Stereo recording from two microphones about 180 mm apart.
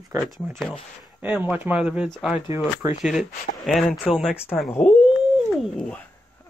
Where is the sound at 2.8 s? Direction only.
15° right (ahead or behind).